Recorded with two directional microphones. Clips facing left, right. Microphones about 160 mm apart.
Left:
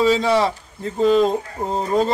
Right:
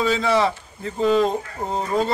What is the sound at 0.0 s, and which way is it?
Speech, 35° left (ahead or behind).